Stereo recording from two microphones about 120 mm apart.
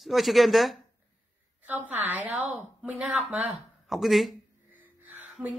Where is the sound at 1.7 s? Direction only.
15° right (ahead or behind).